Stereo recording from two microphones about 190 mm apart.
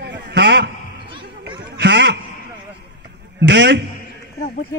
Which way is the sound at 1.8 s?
65° right (ahead or behind).